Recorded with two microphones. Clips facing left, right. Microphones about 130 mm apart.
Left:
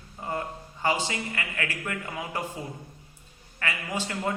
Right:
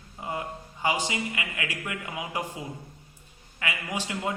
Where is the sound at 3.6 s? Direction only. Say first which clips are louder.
Left 1 dB; 15° right (ahead or behind).